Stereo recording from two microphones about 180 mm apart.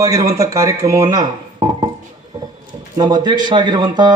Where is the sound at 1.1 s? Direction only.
25° right (ahead or behind).